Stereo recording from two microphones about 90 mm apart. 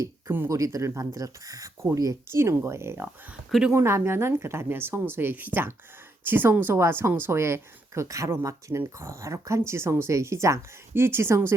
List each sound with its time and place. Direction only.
0.3 s a woman's voice: 25° right (ahead or behind)
0.5 s a woman's voice: 35° right (ahead or behind)